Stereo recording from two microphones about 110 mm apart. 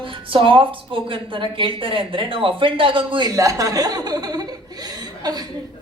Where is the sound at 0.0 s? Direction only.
50° right (ahead or behind).